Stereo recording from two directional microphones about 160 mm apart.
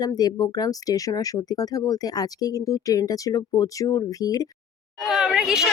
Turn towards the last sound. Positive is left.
turn(degrees=-5)  # may be behind; listen again after turning